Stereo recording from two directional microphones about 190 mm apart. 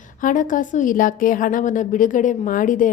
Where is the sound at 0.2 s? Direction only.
45° left (ahead or behind).